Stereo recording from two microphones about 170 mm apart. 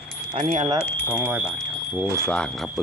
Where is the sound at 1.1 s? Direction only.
5° right (ahead or behind).